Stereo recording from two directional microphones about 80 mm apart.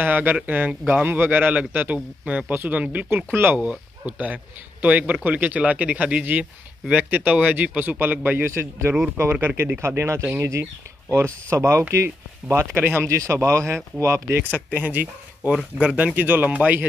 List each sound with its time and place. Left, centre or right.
0.0 s a man's voice: right
14.5 s a man's voice: right